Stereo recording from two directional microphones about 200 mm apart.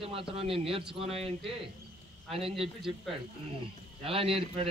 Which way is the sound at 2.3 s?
30° right (ahead or behind).